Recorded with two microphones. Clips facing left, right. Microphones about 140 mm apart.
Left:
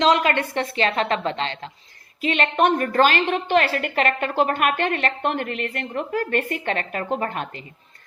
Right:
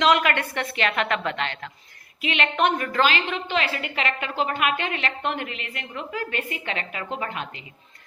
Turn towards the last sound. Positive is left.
turn(degrees=45)  # may be behind; listen again after turning